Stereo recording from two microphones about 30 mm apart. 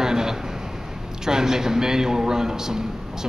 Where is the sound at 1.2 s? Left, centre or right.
Centre.